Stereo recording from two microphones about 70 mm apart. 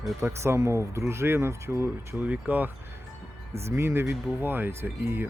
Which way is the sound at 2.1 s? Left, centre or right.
Right.